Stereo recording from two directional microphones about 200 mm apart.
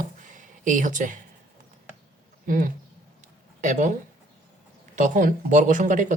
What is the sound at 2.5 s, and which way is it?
Speech, 40° right (ahead or behind).